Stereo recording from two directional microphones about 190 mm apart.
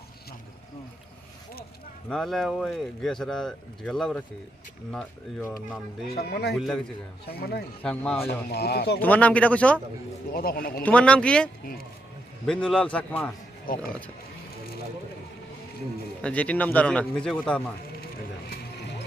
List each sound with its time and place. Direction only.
2.0 s a man's voice: centre (ahead or behind)
6.1 s speech: 60° left (ahead or behind)
7.8 s speech: 5° left (ahead or behind)
8.4 s speech: 55° left (ahead or behind)
9.0 s a man's voice: 10° left (ahead or behind)
10.3 s speech: 50° left (ahead or behind)
10.8 s a man's voice: 5° left (ahead or behind)
12.5 s speech: 5° left (ahead or behind)
13.7 s speech: 50° left (ahead or behind)
16.2 s a man's voice: 5° left (ahead or behind)